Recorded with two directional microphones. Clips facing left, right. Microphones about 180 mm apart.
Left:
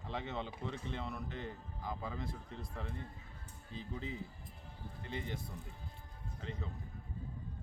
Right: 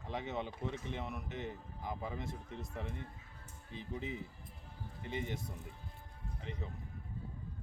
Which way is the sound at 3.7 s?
15° right (ahead or behind).